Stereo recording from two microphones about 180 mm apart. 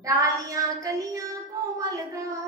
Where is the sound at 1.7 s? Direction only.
20° right (ahead or behind).